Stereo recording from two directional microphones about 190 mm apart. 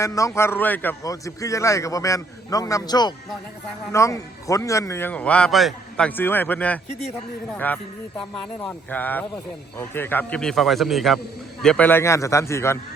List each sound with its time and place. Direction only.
0.0 s a man's voice: 15° left (ahead or behind)